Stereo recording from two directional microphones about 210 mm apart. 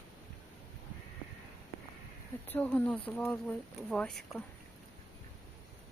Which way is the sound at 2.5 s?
10° left (ahead or behind).